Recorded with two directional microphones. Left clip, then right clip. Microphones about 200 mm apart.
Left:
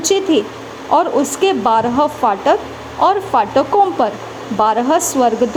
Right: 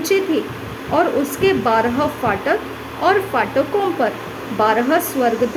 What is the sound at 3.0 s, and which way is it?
A woman's voice, 25° left (ahead or behind).